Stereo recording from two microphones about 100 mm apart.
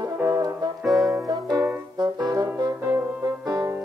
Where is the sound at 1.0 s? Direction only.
35° right (ahead or behind).